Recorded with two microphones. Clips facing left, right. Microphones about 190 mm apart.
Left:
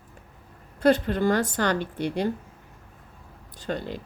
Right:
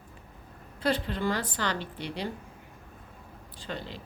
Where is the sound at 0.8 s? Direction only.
50° left (ahead or behind).